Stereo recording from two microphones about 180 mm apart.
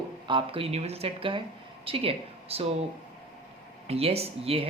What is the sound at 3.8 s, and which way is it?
Speech, 35° right (ahead or behind).